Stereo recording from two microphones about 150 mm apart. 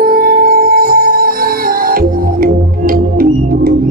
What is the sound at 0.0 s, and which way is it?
Music, 75° right (ahead or behind).